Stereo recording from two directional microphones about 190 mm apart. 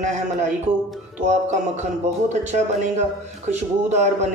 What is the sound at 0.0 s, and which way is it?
Speech, 40° right (ahead or behind).